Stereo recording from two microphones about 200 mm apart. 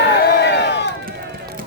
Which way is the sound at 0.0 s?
55° left (ahead or behind).